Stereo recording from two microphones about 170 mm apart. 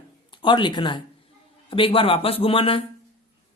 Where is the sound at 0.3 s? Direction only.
30° left (ahead or behind).